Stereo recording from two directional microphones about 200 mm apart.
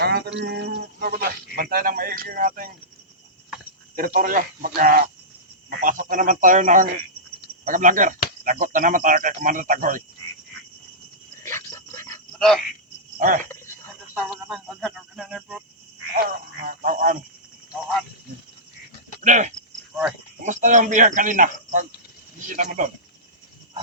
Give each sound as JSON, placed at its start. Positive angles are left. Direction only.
{"t": 0.0, "sound": "a man's voice", "side_deg": -55}
{"t": 3.9, "sound": "a man's voice", "side_deg": -45}
{"t": 11.4, "sound": "cricket", "side_deg": 15}
{"t": 13.1, "sound": "cricket", "side_deg": -40}
{"t": 14.1, "sound": "speech", "side_deg": -5}
{"t": 16.1, "sound": "a man's voice", "side_deg": -45}
{"t": 19.2, "sound": "speech", "side_deg": -35}